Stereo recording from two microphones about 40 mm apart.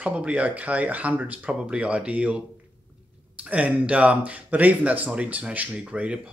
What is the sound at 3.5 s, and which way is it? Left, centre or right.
Speech, right.